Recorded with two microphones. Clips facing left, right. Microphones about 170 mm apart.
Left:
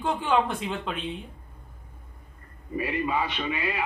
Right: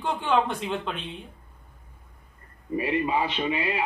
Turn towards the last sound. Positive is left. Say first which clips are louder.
# right 3 dB
turn(degrees=-25)  # may be behind; listen again after turning